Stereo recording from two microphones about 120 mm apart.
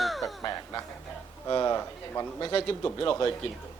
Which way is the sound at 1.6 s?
25° left (ahead or behind).